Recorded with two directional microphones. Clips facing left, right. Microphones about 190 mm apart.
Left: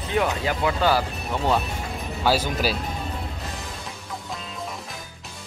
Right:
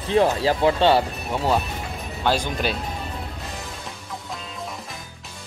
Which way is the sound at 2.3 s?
5° left (ahead or behind).